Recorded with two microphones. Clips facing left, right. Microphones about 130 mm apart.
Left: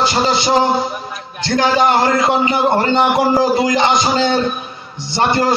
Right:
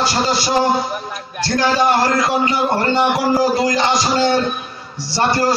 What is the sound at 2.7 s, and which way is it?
A man's voice, 20° left (ahead or behind).